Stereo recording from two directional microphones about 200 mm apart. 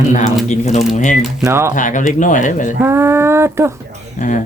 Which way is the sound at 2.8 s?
10° right (ahead or behind).